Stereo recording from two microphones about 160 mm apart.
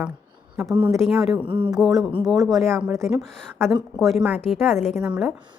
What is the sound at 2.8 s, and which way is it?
Speech, 10° right (ahead or behind).